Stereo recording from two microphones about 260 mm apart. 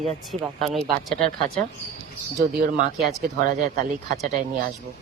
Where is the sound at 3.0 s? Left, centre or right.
Right.